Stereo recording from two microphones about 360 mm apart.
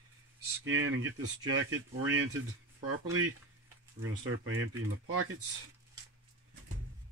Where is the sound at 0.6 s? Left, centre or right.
Right.